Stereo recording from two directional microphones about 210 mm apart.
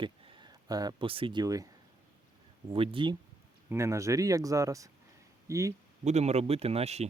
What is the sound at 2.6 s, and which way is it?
Speech, 25° right (ahead or behind).